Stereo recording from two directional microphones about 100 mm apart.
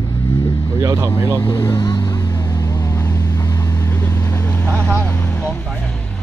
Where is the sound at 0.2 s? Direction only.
25° left (ahead or behind).